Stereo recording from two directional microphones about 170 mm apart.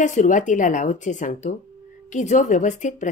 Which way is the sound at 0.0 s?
50° left (ahead or behind).